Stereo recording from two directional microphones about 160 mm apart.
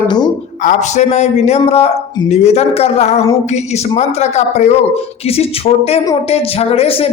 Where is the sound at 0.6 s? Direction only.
45° left (ahead or behind).